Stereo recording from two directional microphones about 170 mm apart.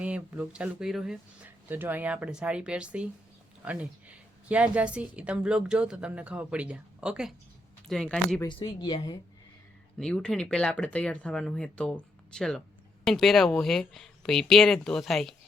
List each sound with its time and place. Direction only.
0.0 s a woman's voice: 10° right (ahead or behind)
8.4 s speech: 30° left (ahead or behind)
10.0 s speech: 5° left (ahead or behind)